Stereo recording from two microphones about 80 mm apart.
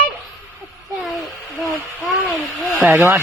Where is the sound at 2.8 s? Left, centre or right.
Right.